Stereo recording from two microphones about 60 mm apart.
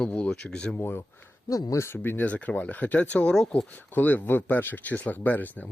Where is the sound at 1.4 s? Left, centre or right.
Left.